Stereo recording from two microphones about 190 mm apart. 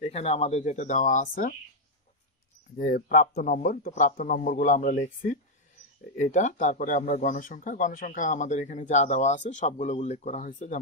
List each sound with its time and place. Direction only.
0.0 s speech: 35° left (ahead or behind)
2.7 s speech: 45° left (ahead or behind)